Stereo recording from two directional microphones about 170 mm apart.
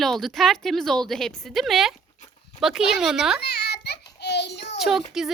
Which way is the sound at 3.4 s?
70° left (ahead or behind).